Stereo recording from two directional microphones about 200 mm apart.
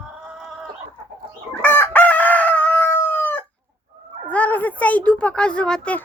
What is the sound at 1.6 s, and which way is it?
Chicken, 10° left (ahead or behind).